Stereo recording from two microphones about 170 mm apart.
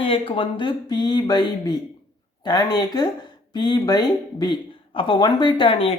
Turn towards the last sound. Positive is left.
turn(degrees=30)  # may be behind; listen again after turning